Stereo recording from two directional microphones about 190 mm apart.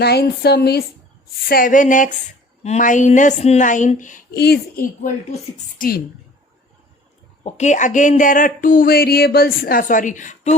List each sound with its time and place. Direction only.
0.0 s a woman's voice: 60° left (ahead or behind)
5.8 s speech: 45° left (ahead or behind)
7.4 s speech: 35° left (ahead or behind)